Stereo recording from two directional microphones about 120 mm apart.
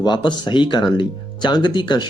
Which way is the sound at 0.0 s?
35° left (ahead or behind).